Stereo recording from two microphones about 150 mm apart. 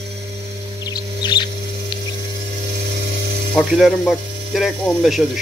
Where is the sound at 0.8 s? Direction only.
25° left (ahead or behind).